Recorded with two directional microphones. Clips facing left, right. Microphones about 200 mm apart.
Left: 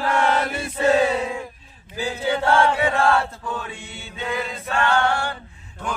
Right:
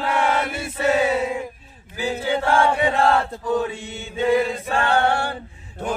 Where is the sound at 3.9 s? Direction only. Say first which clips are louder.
Right 10 dB; 30° right (ahead or behind).